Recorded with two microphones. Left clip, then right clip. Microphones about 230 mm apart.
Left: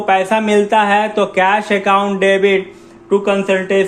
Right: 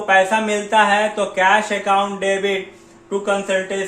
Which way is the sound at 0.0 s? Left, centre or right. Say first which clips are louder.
Left 1 dB; left.